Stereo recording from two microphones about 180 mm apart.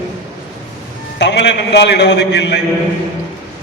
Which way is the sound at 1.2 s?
75° left (ahead or behind).